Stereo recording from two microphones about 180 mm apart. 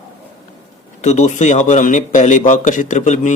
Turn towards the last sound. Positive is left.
turn(degrees=45)  # may be behind; listen again after turning